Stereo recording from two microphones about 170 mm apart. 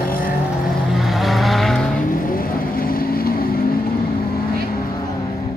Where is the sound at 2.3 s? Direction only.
60° left (ahead or behind).